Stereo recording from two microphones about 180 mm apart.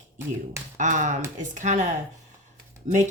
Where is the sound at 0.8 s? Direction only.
45° right (ahead or behind).